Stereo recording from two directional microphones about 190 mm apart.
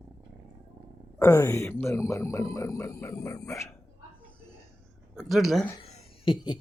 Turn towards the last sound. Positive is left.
turn(degrees=25)  # may be behind; listen again after turning